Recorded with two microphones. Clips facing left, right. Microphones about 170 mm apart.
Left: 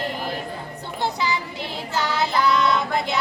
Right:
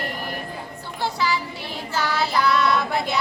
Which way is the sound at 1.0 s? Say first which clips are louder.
Right 1 dB; 20° left (ahead or behind).